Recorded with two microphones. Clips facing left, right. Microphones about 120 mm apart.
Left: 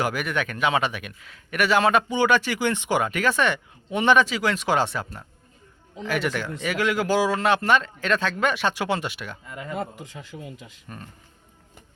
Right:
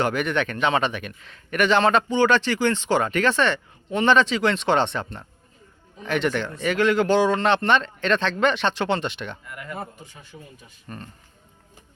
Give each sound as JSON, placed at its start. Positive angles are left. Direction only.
{"t": 0.0, "sound": "a man's voice", "side_deg": 5}
{"t": 9.5, "sound": "speech", "side_deg": 25}
{"t": 9.7, "sound": "speech", "side_deg": 90}
{"t": 10.8, "sound": "speech", "side_deg": 5}